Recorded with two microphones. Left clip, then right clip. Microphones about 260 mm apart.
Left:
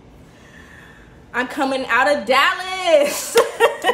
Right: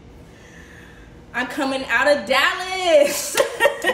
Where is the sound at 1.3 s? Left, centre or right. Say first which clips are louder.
Left 3 dB; centre.